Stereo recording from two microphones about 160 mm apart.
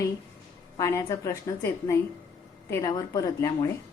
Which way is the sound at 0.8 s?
20° left (ahead or behind).